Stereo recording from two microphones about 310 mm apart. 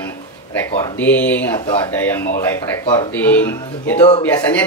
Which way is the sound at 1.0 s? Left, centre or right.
Centre.